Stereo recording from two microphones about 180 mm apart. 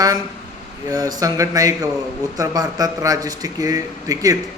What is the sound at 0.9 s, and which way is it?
Speech, 20° right (ahead or behind).